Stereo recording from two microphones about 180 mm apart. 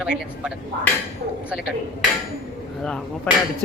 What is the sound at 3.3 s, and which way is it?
Speech, 5° left (ahead or behind).